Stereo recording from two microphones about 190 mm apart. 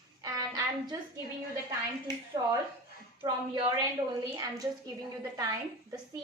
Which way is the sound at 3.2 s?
25° right (ahead or behind).